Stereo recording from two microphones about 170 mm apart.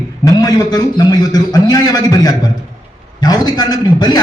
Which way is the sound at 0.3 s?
20° left (ahead or behind).